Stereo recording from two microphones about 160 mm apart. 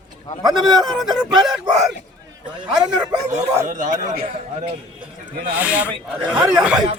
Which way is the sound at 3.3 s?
50° right (ahead or behind).